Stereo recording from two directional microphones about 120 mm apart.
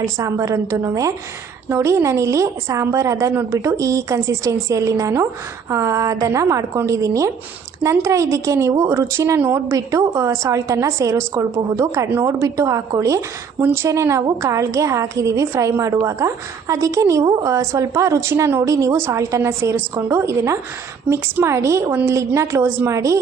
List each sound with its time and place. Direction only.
0.0 s a woman's voice: 25° right (ahead or behind)